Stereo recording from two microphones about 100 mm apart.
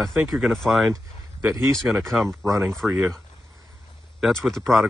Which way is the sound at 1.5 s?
30° right (ahead or behind).